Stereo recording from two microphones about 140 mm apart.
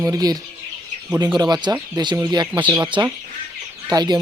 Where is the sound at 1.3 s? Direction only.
30° right (ahead or behind).